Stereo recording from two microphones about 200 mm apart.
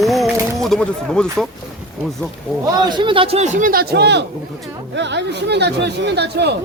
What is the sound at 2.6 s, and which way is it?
Speech, 20° right (ahead or behind).